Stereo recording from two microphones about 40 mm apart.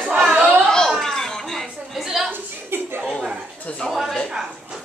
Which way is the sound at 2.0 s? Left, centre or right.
Centre.